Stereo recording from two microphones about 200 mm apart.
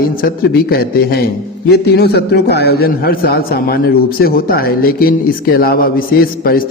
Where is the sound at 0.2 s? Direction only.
50° left (ahead or behind).